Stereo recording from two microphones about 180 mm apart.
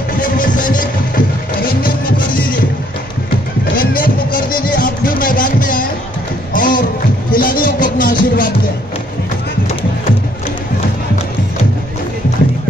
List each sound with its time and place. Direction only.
0.2 s music: 50° left (ahead or behind)
3.7 s music: 50° left (ahead or behind)